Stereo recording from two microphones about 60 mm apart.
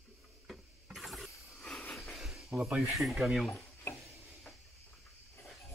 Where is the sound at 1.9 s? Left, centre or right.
Centre.